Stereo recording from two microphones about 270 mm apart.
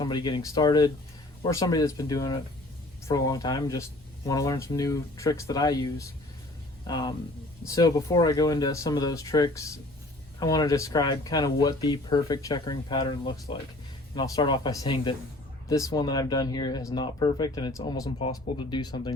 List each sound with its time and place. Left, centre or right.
0.0 s speech: centre